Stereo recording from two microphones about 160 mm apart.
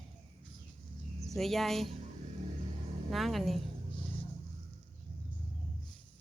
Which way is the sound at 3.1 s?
Centre (ahead or behind).